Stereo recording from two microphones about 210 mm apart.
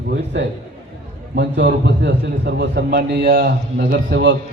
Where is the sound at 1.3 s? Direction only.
45° right (ahead or behind).